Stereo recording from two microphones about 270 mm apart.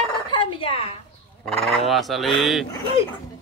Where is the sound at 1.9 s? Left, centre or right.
Centre.